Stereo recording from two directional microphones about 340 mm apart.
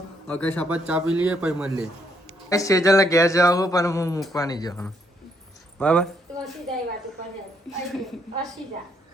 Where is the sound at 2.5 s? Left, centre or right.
Centre.